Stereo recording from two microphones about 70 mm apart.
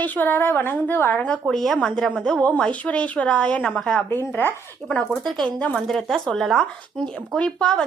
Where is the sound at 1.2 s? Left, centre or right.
Centre.